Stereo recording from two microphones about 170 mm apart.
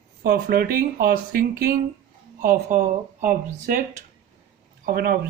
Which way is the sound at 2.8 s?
50° right (ahead or behind).